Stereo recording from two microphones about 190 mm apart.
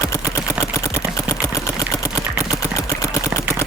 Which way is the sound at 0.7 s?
15° left (ahead or behind).